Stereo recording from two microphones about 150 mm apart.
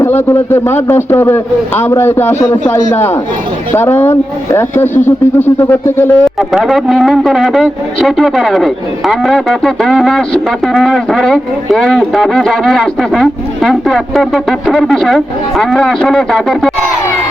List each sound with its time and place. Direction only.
0.0 s a man's voice: 15° left (ahead or behind)
6.2 s speech: centre (ahead or behind)